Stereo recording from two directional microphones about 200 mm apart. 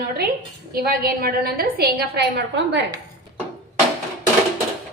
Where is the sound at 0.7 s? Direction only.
45° right (ahead or behind).